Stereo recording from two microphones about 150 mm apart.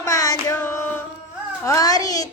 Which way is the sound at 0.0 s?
20° left (ahead or behind).